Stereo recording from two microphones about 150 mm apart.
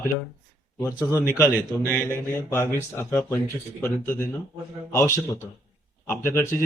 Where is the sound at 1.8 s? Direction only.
15° left (ahead or behind).